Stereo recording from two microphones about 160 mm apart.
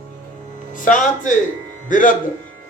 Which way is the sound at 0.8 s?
55° left (ahead or behind).